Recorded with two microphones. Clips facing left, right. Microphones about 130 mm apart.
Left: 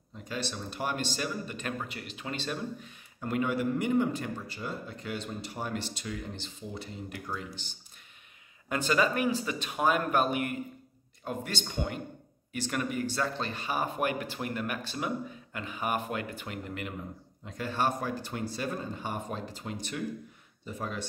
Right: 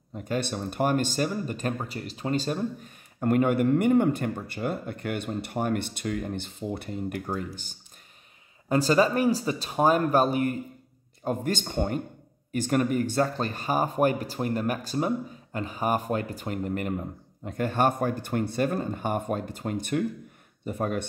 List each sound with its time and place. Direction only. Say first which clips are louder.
0.1 s speech: right 7 dB; 55° right (ahead or behind)
8.6 s speech: right 6 dB; 35° right (ahead or behind); by 21.1 s 55° right (ahead or behind)